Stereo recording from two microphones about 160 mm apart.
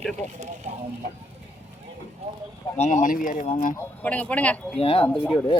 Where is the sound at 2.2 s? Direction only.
35° right (ahead or behind).